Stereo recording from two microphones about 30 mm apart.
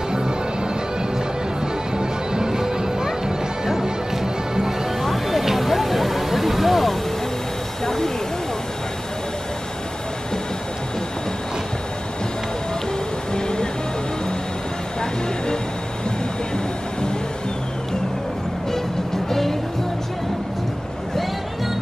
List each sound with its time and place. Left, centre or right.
2.0 s music: right
5.0 s a sound: centre
7.8 s a sound: centre
13.3 s music: left
15.0 s vehicle: left
19.2 s music: centre